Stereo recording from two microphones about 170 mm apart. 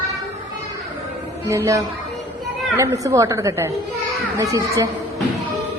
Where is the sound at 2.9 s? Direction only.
20° right (ahead or behind).